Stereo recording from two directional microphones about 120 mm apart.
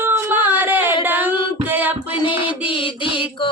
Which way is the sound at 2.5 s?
45° left (ahead or behind).